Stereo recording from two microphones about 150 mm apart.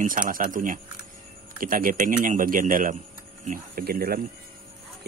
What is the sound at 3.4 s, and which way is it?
Speech, 75° right (ahead or behind).